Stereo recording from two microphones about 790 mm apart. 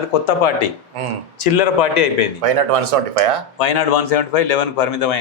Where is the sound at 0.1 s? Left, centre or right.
Left.